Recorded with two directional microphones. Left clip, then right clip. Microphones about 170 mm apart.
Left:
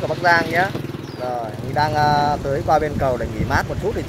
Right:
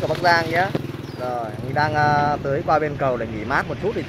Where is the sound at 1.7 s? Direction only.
25° right (ahead or behind).